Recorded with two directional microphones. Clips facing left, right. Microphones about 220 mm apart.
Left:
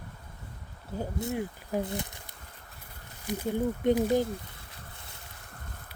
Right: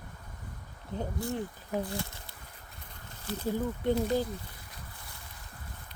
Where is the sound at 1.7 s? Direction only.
20° left (ahead or behind).